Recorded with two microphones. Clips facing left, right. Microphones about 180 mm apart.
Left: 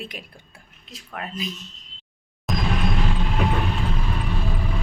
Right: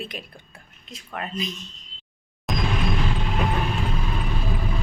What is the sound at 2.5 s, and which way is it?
Vehicle, centre (ahead or behind).